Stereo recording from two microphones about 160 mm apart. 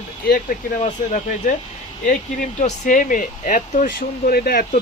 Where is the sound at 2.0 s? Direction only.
55° left (ahead or behind).